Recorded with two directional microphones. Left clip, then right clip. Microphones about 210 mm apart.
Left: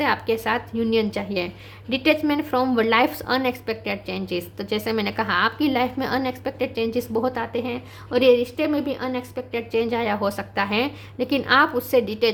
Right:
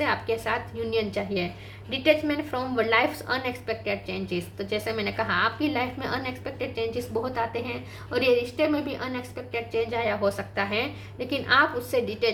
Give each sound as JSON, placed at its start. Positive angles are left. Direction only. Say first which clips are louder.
{"t": 0.0, "sound": "a woman's voice", "louder": "left 4 dB", "side_deg": 50}